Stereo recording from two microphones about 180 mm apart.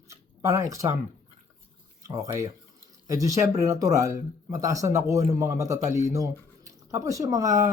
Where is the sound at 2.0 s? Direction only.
15° right (ahead or behind).